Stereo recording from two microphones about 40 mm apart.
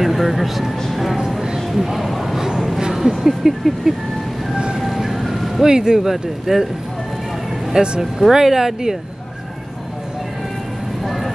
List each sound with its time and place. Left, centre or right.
0.0 s a man's voice: centre
1.7 s a sound: centre
2.8 s speech: centre
4.8 s music: centre
5.7 s speech: centre
5.9 s speech: centre
7.7 s speech: right
8.0 s speech: centre
11.1 s vehicle: centre